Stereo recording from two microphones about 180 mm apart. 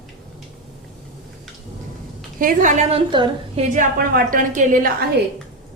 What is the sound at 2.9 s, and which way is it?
Speech, 25° right (ahead or behind).